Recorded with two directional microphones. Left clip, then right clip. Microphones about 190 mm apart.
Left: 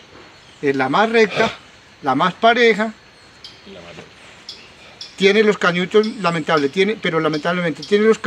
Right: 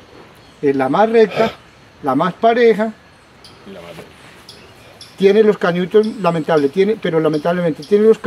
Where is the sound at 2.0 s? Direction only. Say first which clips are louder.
Even; centre (ahead or behind).